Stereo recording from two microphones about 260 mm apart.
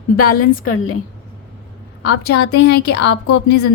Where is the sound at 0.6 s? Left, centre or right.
Left.